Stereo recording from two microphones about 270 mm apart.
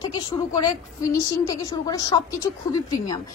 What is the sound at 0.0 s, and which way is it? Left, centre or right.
A woman's voice, centre.